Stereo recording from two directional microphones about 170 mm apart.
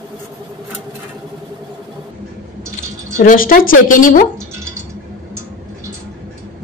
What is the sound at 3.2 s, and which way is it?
Speech, 55° left (ahead or behind).